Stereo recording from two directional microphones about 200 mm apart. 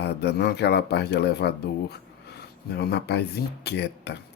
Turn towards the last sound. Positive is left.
turn(degrees=55)  # may be behind; listen again after turning